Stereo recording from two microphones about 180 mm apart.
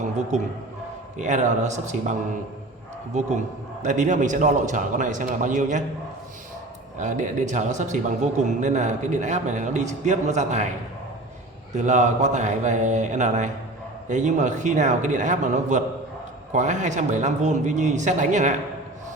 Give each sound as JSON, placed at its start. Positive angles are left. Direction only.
{"t": 0.0, "sound": "a man's voice", "side_deg": -40}
{"t": 3.8, "sound": "a man's voice", "side_deg": -40}
{"t": 7.0, "sound": "a man's voice", "side_deg": -45}
{"t": 11.7, "sound": "a man's voice", "side_deg": -40}